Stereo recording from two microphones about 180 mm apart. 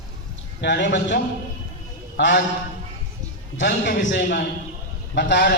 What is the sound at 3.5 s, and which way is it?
A man's voice, 80° left.